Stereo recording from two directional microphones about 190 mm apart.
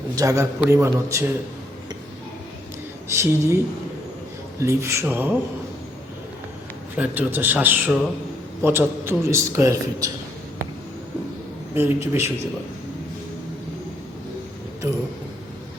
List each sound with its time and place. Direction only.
0.2 s a man's voice: 15° right (ahead or behind)
3.1 s a man's voice: 15° right (ahead or behind)
4.6 s a man's voice: 15° right (ahead or behind)
6.9 s a man's voice: 10° right (ahead or behind)
11.7 s a man's voice: 10° right (ahead or behind)